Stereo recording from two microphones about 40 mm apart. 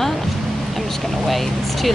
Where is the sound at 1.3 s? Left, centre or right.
Centre.